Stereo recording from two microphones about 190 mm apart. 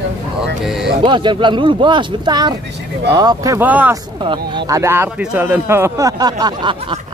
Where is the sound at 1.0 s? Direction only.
25° right (ahead or behind); by 4.0 s 10° right (ahead or behind).